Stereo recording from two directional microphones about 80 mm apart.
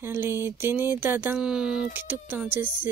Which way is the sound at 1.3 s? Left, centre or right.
Centre.